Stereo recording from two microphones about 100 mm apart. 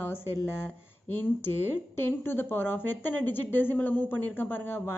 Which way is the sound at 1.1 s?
20° left (ahead or behind).